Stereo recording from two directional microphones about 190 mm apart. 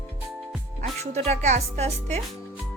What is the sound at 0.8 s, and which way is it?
Music, 35° right (ahead or behind).